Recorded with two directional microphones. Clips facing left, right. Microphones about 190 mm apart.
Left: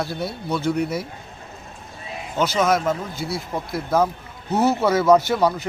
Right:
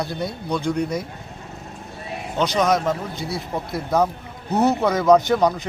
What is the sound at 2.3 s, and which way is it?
Speech, 5° left (ahead or behind).